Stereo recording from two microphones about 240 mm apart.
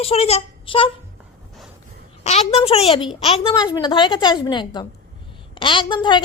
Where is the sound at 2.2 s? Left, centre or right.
Left.